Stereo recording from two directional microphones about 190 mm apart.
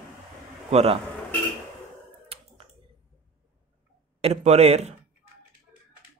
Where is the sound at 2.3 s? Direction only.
30° right (ahead or behind).